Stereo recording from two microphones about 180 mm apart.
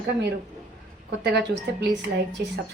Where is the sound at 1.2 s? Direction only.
70° right (ahead or behind).